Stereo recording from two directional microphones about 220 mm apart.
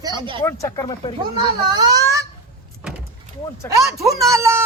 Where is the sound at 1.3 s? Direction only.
20° right (ahead or behind).